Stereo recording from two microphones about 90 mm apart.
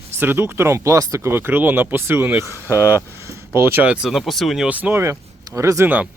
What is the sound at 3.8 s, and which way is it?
Speech, 10° right (ahead or behind).